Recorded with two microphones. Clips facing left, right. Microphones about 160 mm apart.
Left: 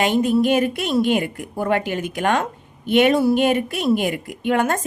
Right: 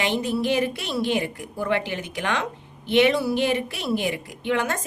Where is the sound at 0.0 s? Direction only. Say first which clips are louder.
Left 7 dB; 50° left (ahead or behind).